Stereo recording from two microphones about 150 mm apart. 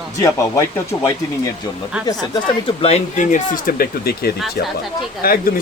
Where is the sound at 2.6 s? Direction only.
40° left (ahead or behind).